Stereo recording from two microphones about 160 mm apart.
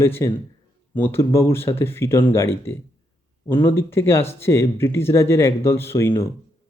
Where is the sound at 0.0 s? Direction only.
15° left (ahead or behind).